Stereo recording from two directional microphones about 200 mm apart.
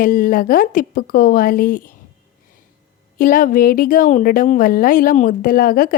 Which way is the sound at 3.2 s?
45° left (ahead or behind).